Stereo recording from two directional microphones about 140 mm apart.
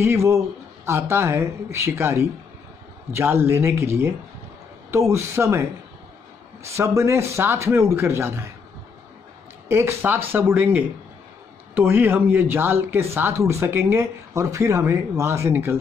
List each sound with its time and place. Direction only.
0.0 s speech: 20° right (ahead or behind)
9.7 s speech: 15° right (ahead or behind)